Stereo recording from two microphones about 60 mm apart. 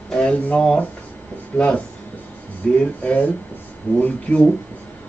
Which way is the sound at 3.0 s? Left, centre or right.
Left.